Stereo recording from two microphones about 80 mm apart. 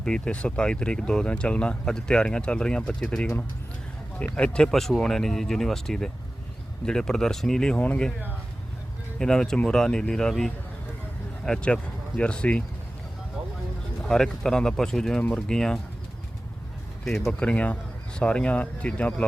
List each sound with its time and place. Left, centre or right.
0.0 s speech: centre
9.1 s speech: centre
14.0 s speech: centre
17.1 s speech: centre
17.4 s speech: centre